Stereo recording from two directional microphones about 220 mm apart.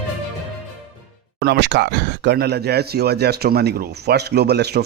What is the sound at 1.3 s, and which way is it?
Speech, 50° right (ahead or behind).